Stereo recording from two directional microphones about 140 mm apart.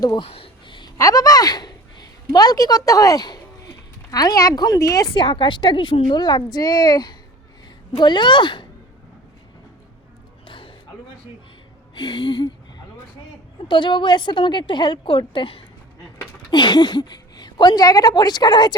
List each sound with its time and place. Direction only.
0.0 s a woman's voice: 25° left (ahead or behind)
0.3 s a sound: 40° left (ahead or behind)
0.9 s a woman's voice: 25° left (ahead or behind)
5.1 s a woman's voice: 35° left (ahead or behind)
10.4 s music: 40° left (ahead or behind)
11.9 s a woman's voice: 35° left (ahead or behind)
13.7 s a woman's voice: 35° left (ahead or behind)